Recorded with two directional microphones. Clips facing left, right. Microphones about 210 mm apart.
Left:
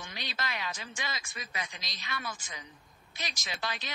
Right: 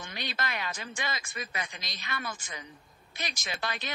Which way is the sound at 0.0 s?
55° right (ahead or behind).